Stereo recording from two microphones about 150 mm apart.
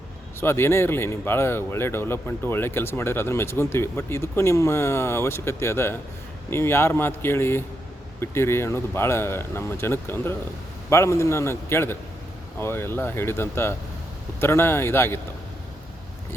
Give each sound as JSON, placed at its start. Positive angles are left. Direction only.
{"t": 0.3, "sound": "speech", "side_deg": 15}